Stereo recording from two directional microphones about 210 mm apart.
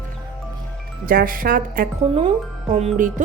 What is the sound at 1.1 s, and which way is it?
A woman's voice, 40° right (ahead or behind).